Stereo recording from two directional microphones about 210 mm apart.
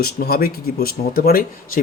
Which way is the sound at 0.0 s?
45° left (ahead or behind).